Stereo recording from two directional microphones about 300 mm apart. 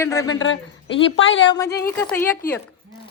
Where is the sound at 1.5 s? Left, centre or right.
Centre.